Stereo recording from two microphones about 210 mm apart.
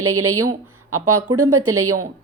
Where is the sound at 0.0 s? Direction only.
90° right.